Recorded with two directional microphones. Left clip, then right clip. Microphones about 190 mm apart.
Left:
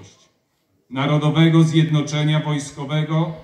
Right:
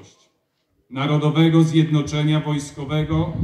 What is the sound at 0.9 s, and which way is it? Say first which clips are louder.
A man's voice: left 1 dB; 45° right (ahead or behind).